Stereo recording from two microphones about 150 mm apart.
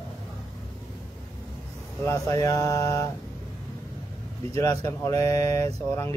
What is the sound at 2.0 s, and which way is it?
Speech, 20° left (ahead or behind).